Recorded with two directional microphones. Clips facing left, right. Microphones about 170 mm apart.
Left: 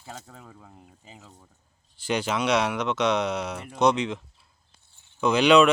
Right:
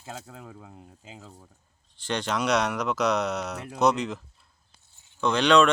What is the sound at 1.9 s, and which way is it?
Speech, 10° left (ahead or behind).